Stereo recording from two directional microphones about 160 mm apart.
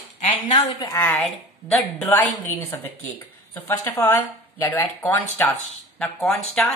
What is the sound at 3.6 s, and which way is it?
Speech, 15° left (ahead or behind).